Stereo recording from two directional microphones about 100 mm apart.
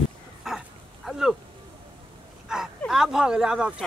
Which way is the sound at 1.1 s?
5° right (ahead or behind).